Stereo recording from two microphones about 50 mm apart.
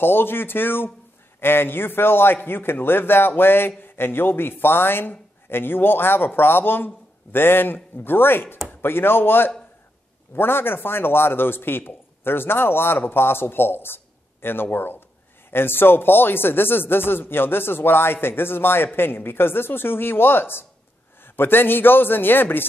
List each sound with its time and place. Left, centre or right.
0.0 s speech: left